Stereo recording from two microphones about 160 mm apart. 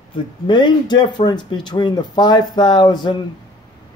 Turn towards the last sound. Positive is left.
turn(degrees=25)  # may be behind; listen again after turning